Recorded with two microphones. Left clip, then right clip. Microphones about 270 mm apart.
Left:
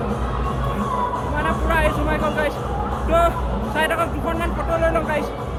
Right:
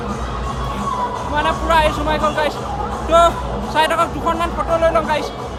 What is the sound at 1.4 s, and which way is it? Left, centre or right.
Music, centre.